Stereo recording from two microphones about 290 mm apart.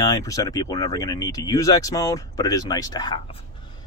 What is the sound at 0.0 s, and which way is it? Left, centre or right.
Speech, centre.